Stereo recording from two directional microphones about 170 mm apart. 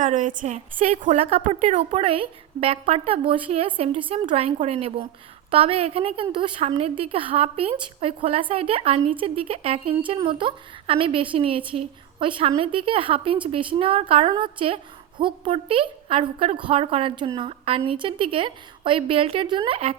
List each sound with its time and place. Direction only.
0.0 s a woman's voice: 50° right (ahead or behind)
1.1 s a woman's voice: 35° right (ahead or behind)
1.4 s a woman's voice: 50° right (ahead or behind)
1.8 s a woman's voice: 30° right (ahead or behind)